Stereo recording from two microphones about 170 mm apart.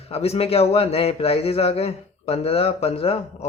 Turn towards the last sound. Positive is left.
turn(degrees=35)  # may be behind; listen again after turning